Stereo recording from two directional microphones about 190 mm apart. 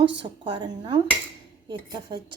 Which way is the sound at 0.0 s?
70° right (ahead or behind).